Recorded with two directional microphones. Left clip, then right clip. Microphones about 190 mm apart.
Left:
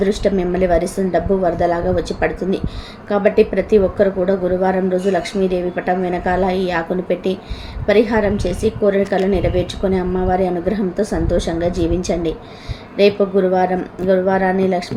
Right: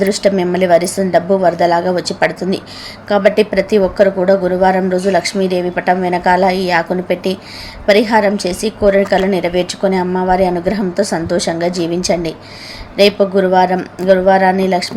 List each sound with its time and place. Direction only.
0.0 s a woman's voice: 15° right (ahead or behind)